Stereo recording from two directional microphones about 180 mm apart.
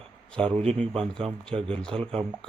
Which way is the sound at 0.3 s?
5° left (ahead or behind).